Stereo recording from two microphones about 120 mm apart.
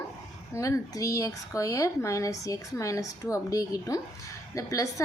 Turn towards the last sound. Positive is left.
turn(degrees=25)  # may be behind; listen again after turning